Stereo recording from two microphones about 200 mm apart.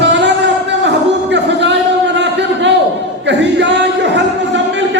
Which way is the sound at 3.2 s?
60° right (ahead or behind).